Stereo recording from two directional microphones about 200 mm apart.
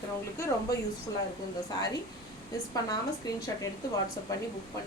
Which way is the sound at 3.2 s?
20° left (ahead or behind).